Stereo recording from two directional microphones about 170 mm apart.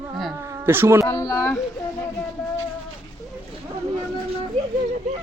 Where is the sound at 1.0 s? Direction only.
20° left (ahead or behind).